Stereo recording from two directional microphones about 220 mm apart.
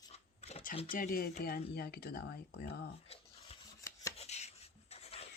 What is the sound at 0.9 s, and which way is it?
Speech, 40° left (ahead or behind).